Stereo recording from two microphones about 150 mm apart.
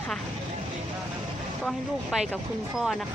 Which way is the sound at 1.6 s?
Centre (ahead or behind).